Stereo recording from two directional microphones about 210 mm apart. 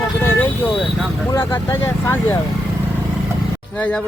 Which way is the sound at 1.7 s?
10° left (ahead or behind).